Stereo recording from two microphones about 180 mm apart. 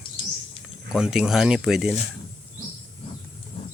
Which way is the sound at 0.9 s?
5° right (ahead or behind).